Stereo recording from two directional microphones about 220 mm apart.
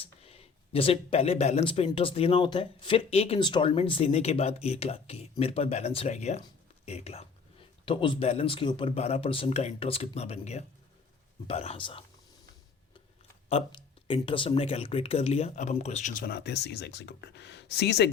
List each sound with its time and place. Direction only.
0.0 s speech: 25° left (ahead or behind)
13.5 s speech: 25° left (ahead or behind); by 18.1 s 50° left (ahead or behind)